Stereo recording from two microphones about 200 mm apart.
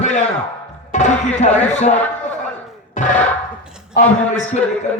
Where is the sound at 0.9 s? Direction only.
35° left (ahead or behind).